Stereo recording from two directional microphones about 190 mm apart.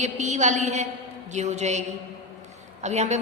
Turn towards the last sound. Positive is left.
turn(degrees=-35)  # may be behind; listen again after turning